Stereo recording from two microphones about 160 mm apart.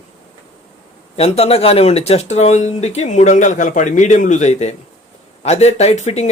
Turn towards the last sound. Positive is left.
turn(degrees=45)  # may be behind; listen again after turning